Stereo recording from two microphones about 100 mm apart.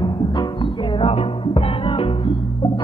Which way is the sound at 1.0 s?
70° left (ahead or behind).